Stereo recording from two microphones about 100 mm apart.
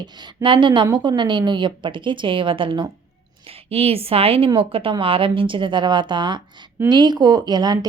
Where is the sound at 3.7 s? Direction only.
80° right.